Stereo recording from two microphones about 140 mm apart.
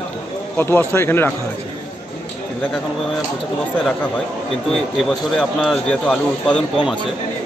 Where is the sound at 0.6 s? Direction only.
15° left (ahead or behind).